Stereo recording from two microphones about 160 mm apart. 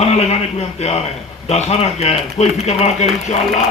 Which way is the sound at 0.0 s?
40° left (ahead or behind).